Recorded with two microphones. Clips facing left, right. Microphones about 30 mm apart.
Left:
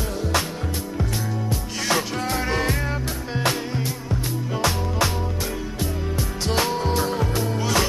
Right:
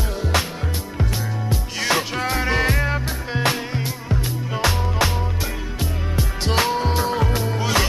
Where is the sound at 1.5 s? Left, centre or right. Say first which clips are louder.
Right 3 dB; right.